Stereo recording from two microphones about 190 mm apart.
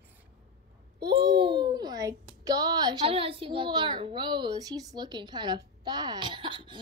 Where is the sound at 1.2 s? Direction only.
25° right (ahead or behind).